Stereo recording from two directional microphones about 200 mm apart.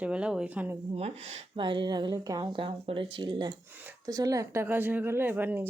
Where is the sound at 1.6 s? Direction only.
25° right (ahead or behind).